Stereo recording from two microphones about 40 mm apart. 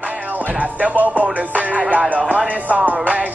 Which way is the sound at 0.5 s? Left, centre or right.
Right.